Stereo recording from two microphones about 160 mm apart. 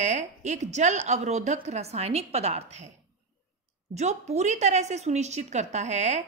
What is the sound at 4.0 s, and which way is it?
A woman's voice, 45° right (ahead or behind).